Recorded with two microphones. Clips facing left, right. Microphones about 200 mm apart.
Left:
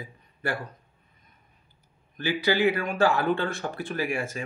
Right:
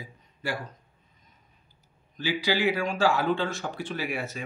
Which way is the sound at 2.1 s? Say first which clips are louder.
Left 2 dB; 55° left (ahead or behind).